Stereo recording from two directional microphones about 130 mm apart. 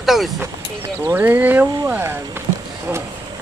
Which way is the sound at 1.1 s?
15° right (ahead or behind).